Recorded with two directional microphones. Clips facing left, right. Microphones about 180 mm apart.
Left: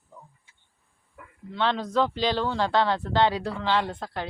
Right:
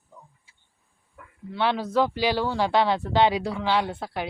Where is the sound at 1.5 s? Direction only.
10° right (ahead or behind).